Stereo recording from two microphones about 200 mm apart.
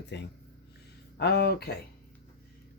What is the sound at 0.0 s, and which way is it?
Speech, 60° left (ahead or behind).